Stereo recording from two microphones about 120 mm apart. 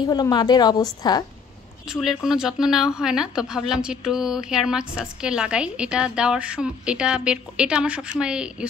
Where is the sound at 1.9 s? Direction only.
5° right (ahead or behind).